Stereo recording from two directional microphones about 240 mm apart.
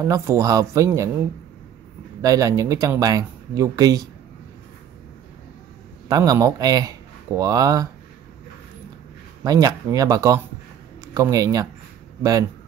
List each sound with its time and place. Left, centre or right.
0.0 s speech: centre
2.2 s speech: centre
6.0 s speech: centre
9.4 s speech: centre